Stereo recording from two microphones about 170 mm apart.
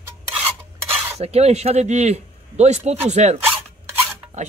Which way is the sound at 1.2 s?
40° right (ahead or behind).